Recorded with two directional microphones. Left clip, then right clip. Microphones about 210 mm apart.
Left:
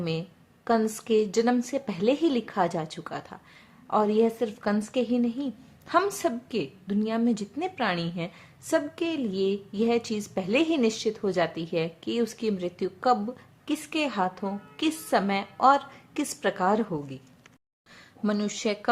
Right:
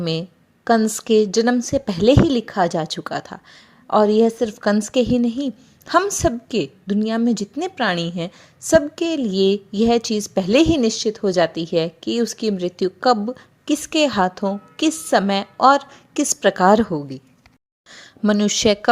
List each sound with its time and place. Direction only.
0.0 s a woman's voice: 35° right (ahead or behind)